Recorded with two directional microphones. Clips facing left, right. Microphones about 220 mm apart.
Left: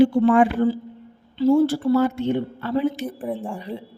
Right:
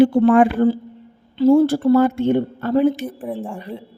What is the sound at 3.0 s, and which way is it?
Speech, centre (ahead or behind).